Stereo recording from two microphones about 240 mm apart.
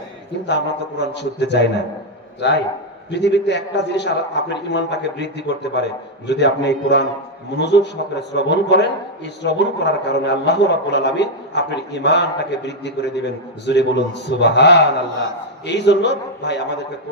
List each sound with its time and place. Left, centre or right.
0.4 s a man's voice: left
3.1 s a man's voice: left